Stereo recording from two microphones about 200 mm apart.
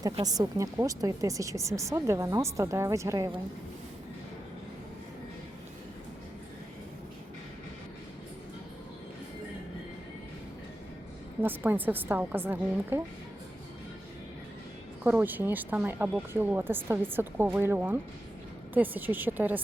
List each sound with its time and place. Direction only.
0.0 s speech: 20° right (ahead or behind)
11.3 s speech: 10° right (ahead or behind)
15.0 s speech: 10° right (ahead or behind)